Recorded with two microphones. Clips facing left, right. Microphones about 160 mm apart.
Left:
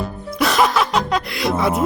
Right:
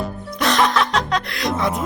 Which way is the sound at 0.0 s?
5° left (ahead or behind).